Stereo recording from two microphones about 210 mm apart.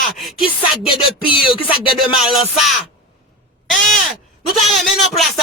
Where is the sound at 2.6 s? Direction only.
Centre (ahead or behind).